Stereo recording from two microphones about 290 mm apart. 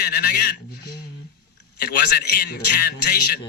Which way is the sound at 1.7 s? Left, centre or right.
Left.